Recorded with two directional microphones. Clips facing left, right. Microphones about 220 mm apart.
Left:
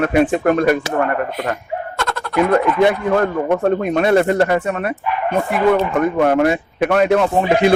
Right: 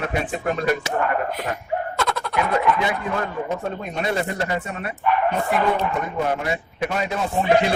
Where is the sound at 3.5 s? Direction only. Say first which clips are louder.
Left 11 dB; 65° left (ahead or behind).